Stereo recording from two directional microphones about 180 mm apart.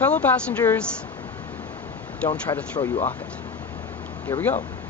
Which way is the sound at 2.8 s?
25° left (ahead or behind).